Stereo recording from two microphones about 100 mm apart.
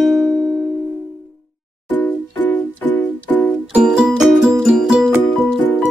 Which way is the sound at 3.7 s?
5° right (ahead or behind).